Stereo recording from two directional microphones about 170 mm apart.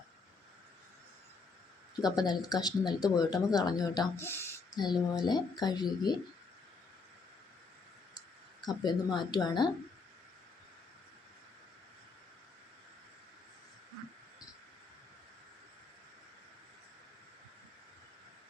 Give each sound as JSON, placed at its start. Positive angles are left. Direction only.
{"t": 2.0, "sound": "speech", "side_deg": 25}
{"t": 8.6, "sound": "speech", "side_deg": 25}